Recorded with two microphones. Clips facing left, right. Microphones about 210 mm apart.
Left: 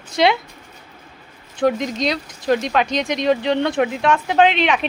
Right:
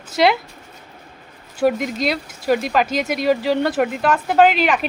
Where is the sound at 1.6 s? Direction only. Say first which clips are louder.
Even; 5° right (ahead or behind).